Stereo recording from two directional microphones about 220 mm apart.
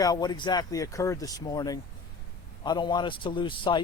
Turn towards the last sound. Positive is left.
turn(degrees=20)  # may be behind; listen again after turning